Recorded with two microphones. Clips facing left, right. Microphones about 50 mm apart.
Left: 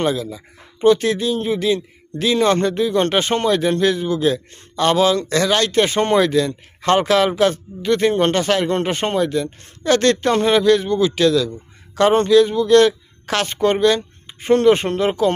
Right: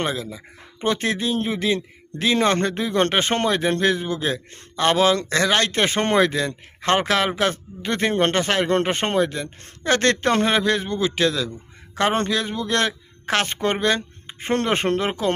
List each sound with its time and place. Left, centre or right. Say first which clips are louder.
0.0 s speech: left 5 dB; right